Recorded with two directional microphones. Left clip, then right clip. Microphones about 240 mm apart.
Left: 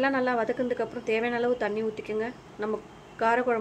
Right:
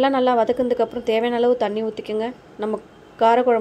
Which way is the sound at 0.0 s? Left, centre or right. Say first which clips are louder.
Right 8 dB; centre.